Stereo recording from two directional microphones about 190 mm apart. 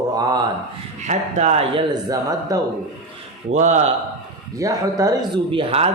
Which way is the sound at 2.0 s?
20° right (ahead or behind).